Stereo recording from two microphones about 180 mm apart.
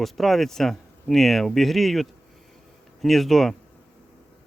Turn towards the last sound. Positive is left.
turn(degrees=0)  # may be behind; listen again after turning